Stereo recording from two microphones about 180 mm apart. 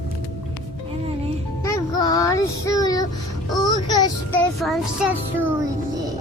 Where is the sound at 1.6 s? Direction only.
20° left (ahead or behind).